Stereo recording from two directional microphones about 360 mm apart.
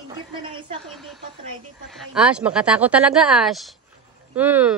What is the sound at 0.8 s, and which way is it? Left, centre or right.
Speech, centre.